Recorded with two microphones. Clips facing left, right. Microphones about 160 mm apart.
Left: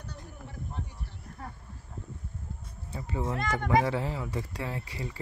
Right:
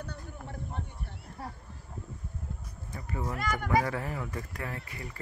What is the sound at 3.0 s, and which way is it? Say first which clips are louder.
Speech: left 3 dB; 25° left (ahead or behind).